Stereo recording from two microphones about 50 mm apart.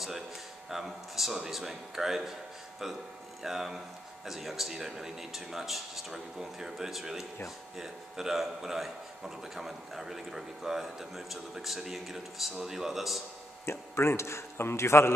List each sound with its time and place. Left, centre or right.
0.7 s a man's voice: centre
3.4 s a man's voice: centre
13.7 s a man's voice: left